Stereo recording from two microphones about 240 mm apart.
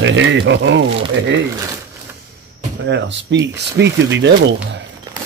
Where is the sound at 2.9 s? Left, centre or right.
Right.